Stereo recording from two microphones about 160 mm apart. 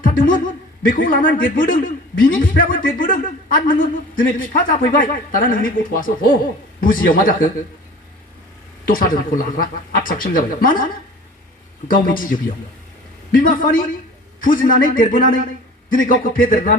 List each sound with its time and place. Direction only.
0.0 s speech: 60° left (ahead or behind)
8.9 s speech: 60° left (ahead or behind)
12.0 s speech: 60° left (ahead or behind)